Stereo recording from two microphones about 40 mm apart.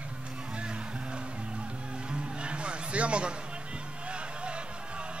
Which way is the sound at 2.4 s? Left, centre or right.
Right.